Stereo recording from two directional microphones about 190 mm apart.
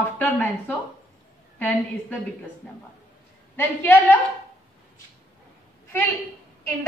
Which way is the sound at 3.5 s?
10° left (ahead or behind).